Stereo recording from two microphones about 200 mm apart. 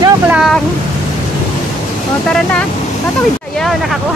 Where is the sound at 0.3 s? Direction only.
Centre (ahead or behind).